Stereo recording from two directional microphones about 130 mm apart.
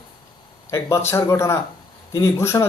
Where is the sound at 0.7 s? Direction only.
20° left (ahead or behind).